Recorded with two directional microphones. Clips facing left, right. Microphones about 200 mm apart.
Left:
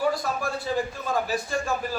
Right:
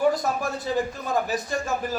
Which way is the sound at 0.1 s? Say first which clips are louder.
Right 2 dB; 20° right (ahead or behind).